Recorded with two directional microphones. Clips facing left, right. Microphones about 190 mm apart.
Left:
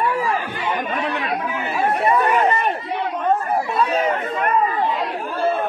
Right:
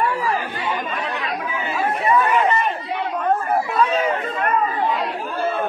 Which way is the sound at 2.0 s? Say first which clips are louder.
Right 1 dB; 40° left (ahead or behind).